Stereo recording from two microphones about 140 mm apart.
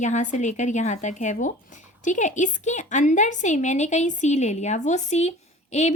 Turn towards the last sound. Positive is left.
turn(degrees=55)  # may be behind; listen again after turning